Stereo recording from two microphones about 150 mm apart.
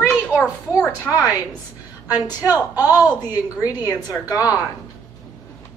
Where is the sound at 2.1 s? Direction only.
10° right (ahead or behind).